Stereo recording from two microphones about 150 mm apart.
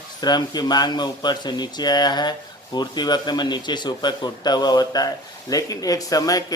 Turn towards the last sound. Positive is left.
turn(degrees=25)  # may be behind; listen again after turning